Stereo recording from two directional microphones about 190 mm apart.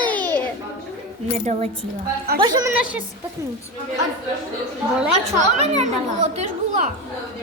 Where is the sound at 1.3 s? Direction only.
35° right (ahead or behind).